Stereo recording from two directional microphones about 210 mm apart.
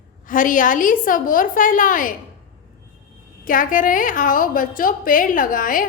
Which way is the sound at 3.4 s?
40° left (ahead or behind).